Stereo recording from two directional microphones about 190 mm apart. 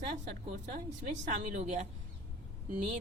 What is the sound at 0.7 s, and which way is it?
A woman's voice, 35° right (ahead or behind).